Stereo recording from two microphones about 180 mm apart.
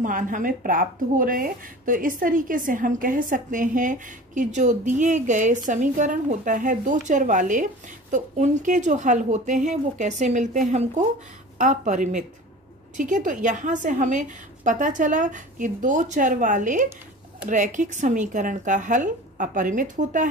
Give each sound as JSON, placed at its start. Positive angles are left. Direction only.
{"t": 0.0, "sound": "a woman's voice", "side_deg": -45}